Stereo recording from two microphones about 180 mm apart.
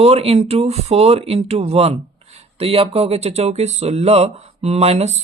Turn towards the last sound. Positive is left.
turn(degrees=-35)  # may be behind; listen again after turning